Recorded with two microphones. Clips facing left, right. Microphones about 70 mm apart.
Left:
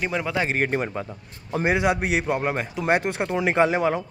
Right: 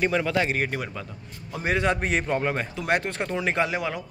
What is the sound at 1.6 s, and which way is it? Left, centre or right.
A man's voice, centre.